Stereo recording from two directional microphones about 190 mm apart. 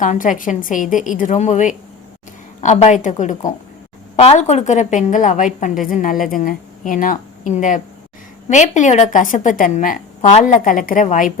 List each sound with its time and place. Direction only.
0.0 s a woman's voice: 40° left (ahead or behind)